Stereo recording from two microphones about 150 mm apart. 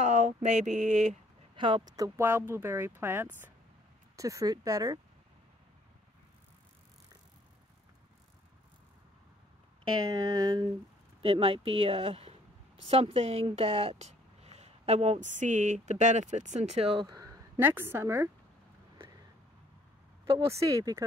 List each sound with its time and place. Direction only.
0.0 s a sound: 55° right (ahead or behind)
1.6 s speech: 30° right (ahead or behind)
10.0 s speech: 25° right (ahead or behind)
11.2 s speech: 40° right (ahead or behind)
17.0 s a sound: 25° right (ahead or behind)
17.6 s speech: 15° right (ahead or behind)
20.4 s speech: 20° right (ahead or behind)